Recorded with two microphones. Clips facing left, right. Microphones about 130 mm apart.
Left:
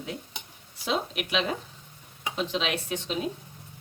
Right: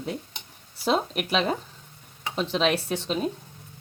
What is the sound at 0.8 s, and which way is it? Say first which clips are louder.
Speech: right 5 dB; 40° right (ahead or behind).